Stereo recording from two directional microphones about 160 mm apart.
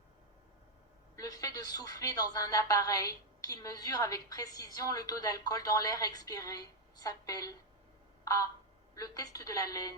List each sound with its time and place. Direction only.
1.1 s a woman's voice: 20° left (ahead or behind)
8.2 s a sound: 20° left (ahead or behind)
9.0 s a woman's voice: 20° left (ahead or behind)